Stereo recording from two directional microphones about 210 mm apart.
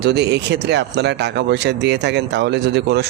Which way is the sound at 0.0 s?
55° right (ahead or behind).